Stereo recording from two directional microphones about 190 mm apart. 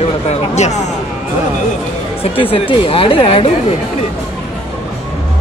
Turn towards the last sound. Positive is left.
turn(degrees=30)  # may be behind; listen again after turning